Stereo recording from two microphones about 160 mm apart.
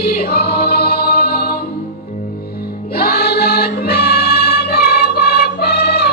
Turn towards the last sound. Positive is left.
turn(degrees=80)